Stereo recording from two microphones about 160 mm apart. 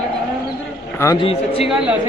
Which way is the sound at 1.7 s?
5° right (ahead or behind).